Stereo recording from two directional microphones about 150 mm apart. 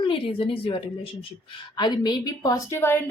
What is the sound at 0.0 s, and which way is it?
Speech, 35° left (ahead or behind).